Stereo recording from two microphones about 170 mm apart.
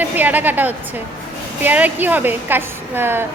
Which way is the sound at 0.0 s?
10° right (ahead or behind).